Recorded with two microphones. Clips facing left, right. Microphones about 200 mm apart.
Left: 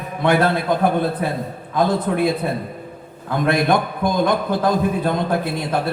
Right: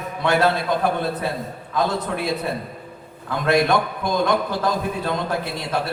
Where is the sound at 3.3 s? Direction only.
55° left (ahead or behind).